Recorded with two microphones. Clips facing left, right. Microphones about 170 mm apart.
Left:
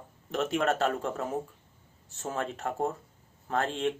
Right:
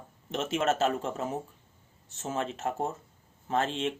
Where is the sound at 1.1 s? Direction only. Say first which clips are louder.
Left 1 dB; 20° right (ahead or behind).